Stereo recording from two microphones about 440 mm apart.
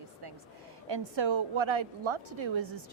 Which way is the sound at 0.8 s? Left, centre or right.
Right.